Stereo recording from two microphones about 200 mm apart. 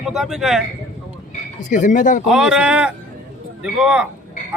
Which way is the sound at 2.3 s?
5° right (ahead or behind).